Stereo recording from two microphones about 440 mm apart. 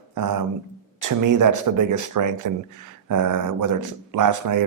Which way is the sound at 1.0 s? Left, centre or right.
Right.